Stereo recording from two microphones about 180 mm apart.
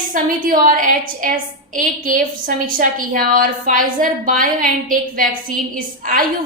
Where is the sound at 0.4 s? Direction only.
50° right (ahead or behind).